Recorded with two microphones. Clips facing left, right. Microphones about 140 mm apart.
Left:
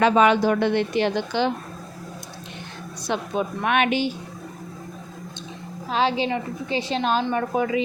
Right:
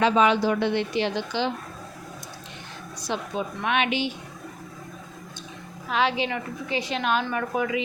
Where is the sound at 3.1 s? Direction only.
55° left (ahead or behind).